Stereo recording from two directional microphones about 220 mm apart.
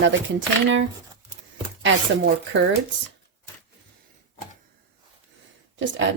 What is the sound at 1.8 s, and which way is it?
Speech, 55° right (ahead or behind).